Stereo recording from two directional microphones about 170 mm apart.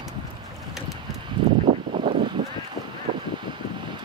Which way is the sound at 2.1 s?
25° right (ahead or behind).